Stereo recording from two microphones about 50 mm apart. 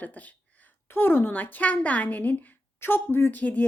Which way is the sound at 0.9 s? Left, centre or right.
Left.